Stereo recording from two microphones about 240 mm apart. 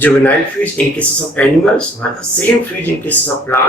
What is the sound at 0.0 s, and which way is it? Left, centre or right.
Speech, centre.